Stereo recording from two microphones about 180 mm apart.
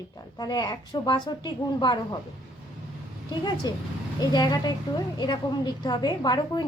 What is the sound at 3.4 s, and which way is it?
A woman's voice, 25° left (ahead or behind).